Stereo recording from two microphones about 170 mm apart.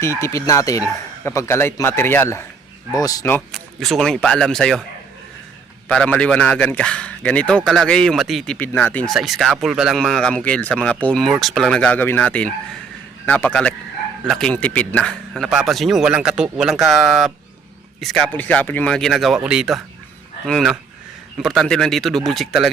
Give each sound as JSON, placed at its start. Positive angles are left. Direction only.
{"t": 0.0, "sound": "speech", "side_deg": 15}
{"t": 3.5, "sound": "speech", "side_deg": 0}
{"t": 5.9, "sound": "speech", "side_deg": 5}
{"t": 8.5, "sound": "speech", "side_deg": 10}
{"t": 9.1, "sound": "speech", "side_deg": 0}